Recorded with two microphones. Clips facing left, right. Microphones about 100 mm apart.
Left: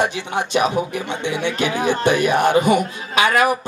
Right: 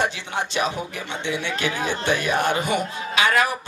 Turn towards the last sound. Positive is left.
turn(degrees=20)  # may be behind; listen again after turning